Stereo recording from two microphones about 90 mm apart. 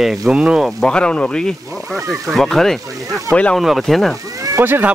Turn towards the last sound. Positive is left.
turn(degrees=-20)  # may be behind; listen again after turning